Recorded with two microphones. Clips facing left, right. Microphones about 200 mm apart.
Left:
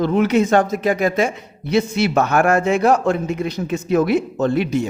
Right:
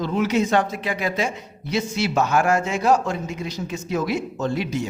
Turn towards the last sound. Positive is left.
turn(degrees=60)  # may be behind; listen again after turning